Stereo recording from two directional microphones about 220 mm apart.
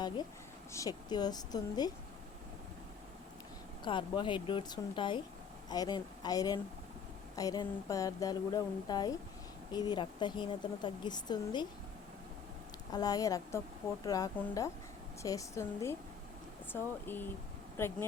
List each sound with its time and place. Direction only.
0.7 s speech: 15° left (ahead or behind)
3.8 s a woman's voice: 20° left (ahead or behind)
12.9 s speech: 15° left (ahead or behind)